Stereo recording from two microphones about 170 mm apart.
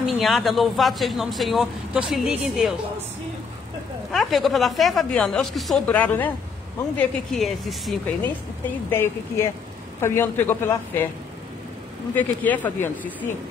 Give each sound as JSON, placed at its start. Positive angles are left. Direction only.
{"t": 0.0, "sound": "a man's voice", "side_deg": 0}
{"t": 4.1, "sound": "a man's voice", "side_deg": 0}
{"t": 8.2, "sound": "speech", "side_deg": 10}
{"t": 12.2, "sound": "speech", "side_deg": 10}